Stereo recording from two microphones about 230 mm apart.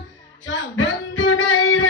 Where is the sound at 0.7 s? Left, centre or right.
Left.